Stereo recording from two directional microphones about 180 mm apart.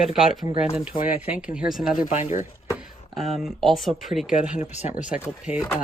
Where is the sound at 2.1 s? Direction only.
45° left (ahead or behind).